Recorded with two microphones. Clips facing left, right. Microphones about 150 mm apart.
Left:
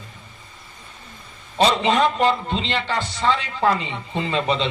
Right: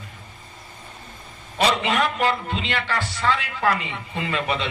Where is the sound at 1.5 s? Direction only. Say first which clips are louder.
Left 3 dB; 25° left (ahead or behind).